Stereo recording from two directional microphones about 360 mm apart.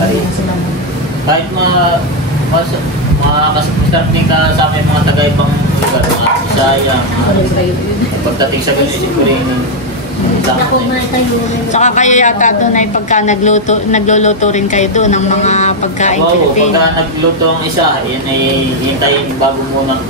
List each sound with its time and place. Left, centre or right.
11.7 s a woman's voice: centre